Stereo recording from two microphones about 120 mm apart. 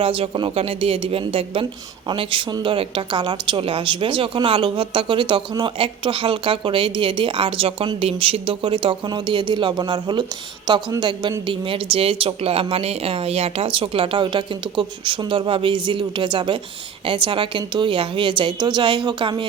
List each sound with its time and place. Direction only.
0.0 s speech: 50° right (ahead or behind)